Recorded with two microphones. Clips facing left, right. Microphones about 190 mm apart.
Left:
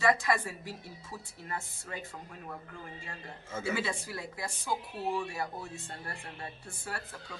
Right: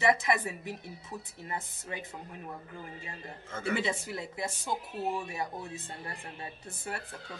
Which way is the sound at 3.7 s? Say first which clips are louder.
Right 4 dB; 25° right (ahead or behind).